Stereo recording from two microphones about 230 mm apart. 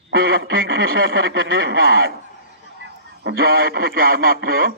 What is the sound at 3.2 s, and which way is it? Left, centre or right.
Speech, right.